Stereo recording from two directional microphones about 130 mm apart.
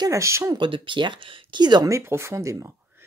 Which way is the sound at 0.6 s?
40° right (ahead or behind).